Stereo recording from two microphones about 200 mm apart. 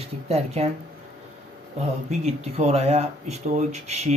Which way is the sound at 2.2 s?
30° right (ahead or behind).